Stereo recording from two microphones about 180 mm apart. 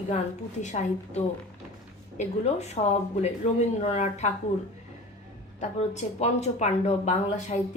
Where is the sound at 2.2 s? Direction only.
40° left (ahead or behind).